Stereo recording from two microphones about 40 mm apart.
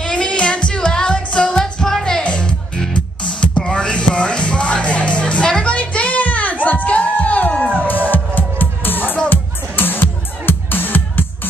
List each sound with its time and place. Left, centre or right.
0.0 s music: left
1.6 s music: centre
2.2 s music: left